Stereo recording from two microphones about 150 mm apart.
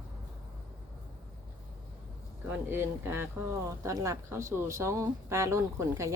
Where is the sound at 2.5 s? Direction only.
15° right (ahead or behind).